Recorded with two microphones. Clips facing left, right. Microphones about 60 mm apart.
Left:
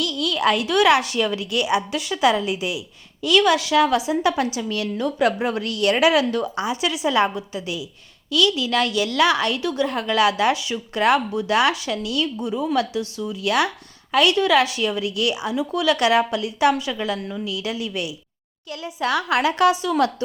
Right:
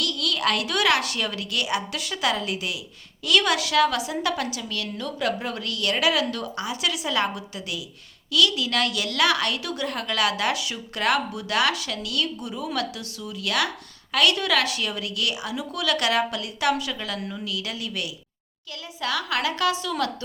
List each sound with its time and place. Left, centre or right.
0.0 s a woman's voice: centre
3.2 s a woman's voice: centre
3.8 s a woman's voice: centre
18.9 s a woman's voice: left